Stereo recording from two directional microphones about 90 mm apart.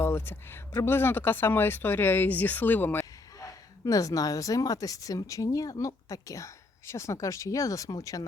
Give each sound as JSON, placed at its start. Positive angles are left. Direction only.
{"t": 0.0, "sound": "speech", "side_deg": 25}
{"t": 3.3, "sound": "speech", "side_deg": 40}